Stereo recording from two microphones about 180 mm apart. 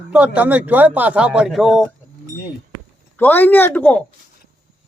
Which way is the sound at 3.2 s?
10° left (ahead or behind).